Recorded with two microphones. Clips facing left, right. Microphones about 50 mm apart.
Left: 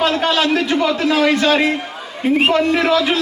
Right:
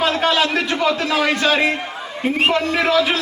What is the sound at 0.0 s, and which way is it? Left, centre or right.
A man's voice, centre.